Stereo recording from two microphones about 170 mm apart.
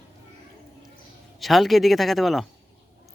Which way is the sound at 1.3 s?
Centre (ahead or behind).